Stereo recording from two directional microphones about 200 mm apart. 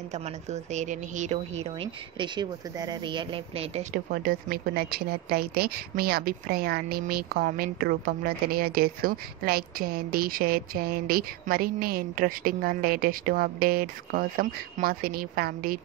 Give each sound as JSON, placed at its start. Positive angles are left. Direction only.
{"t": 0.1, "sound": "a woman's voice", "side_deg": -35}
{"t": 3.9, "sound": "a woman's voice", "side_deg": -45}